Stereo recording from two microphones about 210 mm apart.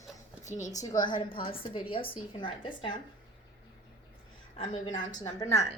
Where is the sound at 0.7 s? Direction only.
15° left (ahead or behind).